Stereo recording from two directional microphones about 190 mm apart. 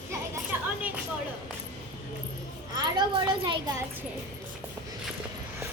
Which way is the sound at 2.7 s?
20° right (ahead or behind).